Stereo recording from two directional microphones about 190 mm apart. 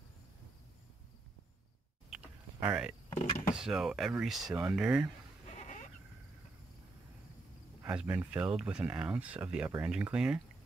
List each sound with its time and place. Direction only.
2.0 s a sound: 5° right (ahead or behind)
3.2 s door: 35° left (ahead or behind)
3.5 s speech: centre (ahead or behind)
5.5 s goat: 40° left (ahead or behind)
7.8 s speech: 5° right (ahead or behind)